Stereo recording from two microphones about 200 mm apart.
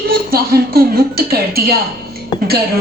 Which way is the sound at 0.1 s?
50° right (ahead or behind).